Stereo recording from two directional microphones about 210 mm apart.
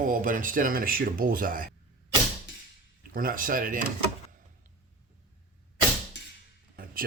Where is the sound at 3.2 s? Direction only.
40° right (ahead or behind).